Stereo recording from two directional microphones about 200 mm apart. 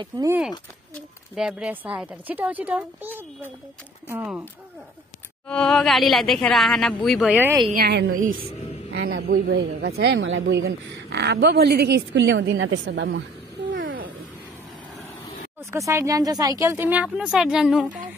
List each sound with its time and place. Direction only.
0.0 s speech: 15° right (ahead or behind)
1.3 s speech: 5° right (ahead or behind)
5.5 s speech: 5° left (ahead or behind)
7.7 s speech: 50° right (ahead or behind)
9.0 s speech: 55° right (ahead or behind)
10.1 s a woman's voice: 75° right (ahead or behind); by 13.2 s 60° right (ahead or behind)
13.8 s a sound: 45° right (ahead or behind)
15.7 s speech: 15° right (ahead or behind)